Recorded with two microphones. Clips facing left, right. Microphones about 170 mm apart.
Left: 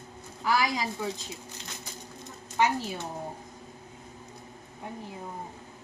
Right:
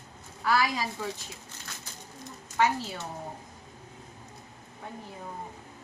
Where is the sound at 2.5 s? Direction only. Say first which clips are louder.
Even; 15° left (ahead or behind).